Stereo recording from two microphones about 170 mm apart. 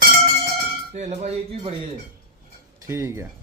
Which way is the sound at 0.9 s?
45° right (ahead or behind).